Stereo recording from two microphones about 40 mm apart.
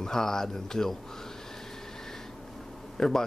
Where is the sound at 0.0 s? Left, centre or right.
Centre.